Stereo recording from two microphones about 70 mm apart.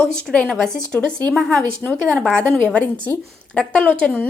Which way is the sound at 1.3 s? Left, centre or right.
Centre.